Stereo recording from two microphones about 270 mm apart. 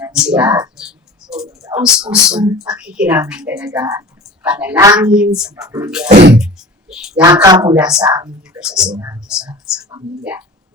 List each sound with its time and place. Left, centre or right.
0.0 s speech: centre
0.8 s a sound: centre
1.6 s speech: centre
6.1 s speech: right
6.4 s speech: centre
7.3 s a woman's voice: centre
8.5 s speech: centre